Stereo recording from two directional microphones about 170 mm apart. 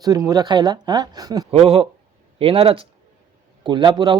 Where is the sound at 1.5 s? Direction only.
35° right (ahead or behind).